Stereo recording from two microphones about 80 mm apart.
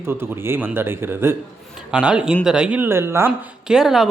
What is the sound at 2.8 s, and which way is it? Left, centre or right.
Speech, right.